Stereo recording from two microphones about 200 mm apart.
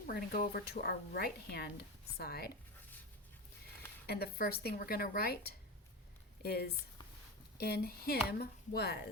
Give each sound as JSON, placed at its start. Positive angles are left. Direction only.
{"t": 0.1, "sound": "speech", "side_deg": 50}
{"t": 4.0, "sound": "speech", "side_deg": 50}